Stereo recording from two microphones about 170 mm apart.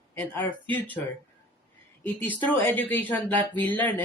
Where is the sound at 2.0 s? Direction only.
10° left (ahead or behind).